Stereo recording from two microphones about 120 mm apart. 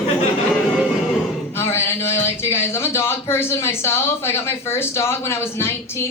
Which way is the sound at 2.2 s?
20° left (ahead or behind).